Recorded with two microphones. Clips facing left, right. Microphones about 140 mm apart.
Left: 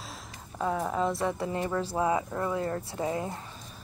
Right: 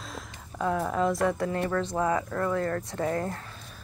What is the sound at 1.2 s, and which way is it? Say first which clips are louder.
Speech: right 4 dB; 80° right.